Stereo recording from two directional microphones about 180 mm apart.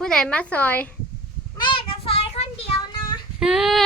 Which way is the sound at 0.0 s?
5° left (ahead or behind).